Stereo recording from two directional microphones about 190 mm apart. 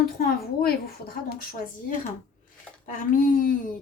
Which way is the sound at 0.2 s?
50° left (ahead or behind).